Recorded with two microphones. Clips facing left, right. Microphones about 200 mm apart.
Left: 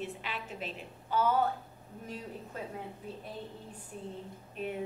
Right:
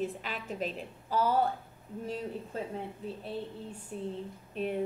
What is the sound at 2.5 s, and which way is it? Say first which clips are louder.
Speech: right 4 dB; 30° right (ahead or behind).